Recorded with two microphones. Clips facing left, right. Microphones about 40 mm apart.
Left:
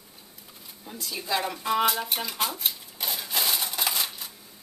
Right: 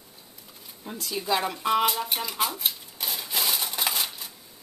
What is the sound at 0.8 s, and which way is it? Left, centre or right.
Speech, right.